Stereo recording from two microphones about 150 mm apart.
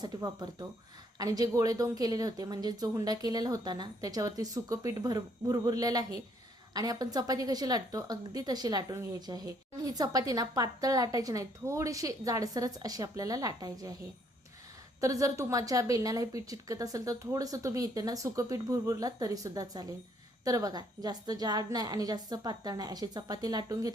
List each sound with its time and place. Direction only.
0.0 s a woman's voice: 30° right (ahead or behind)
15.0 s a woman's voice: 20° right (ahead or behind)